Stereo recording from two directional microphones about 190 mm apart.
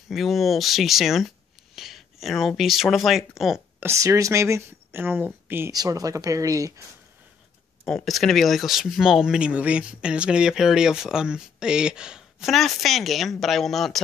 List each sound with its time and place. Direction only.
0.1 s speech: centre (ahead or behind)
3.8 s speech: 15° right (ahead or behind)
7.8 s speech: centre (ahead or behind)